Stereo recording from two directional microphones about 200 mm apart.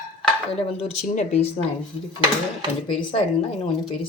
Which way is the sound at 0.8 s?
30° left (ahead or behind).